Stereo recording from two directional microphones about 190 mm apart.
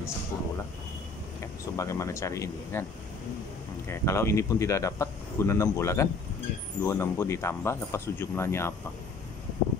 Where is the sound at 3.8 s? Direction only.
15° left (ahead or behind).